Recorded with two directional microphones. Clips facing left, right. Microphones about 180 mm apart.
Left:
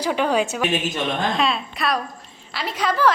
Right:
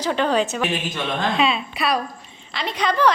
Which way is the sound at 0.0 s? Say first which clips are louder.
Even; 10° left (ahead or behind).